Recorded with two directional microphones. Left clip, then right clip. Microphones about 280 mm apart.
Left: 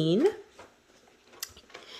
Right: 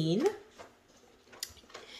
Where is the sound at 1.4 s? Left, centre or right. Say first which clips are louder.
Left 2 dB; centre.